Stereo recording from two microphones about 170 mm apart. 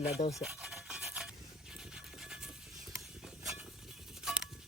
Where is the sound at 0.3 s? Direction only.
5° right (ahead or behind).